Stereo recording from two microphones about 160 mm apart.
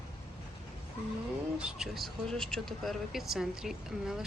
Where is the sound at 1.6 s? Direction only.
5° right (ahead or behind).